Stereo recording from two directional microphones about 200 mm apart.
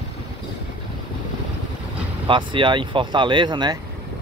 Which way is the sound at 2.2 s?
25° right (ahead or behind).